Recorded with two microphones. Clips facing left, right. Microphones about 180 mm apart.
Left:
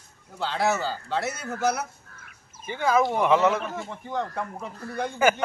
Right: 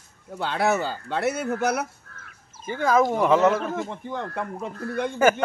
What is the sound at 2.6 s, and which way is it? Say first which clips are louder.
Speech: right 2 dB; 45° right (ahead or behind).